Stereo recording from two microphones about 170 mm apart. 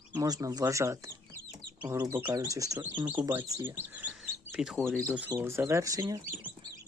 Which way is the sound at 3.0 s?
10° right (ahead or behind).